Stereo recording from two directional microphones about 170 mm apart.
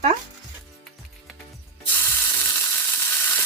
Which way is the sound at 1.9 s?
15° left (ahead or behind).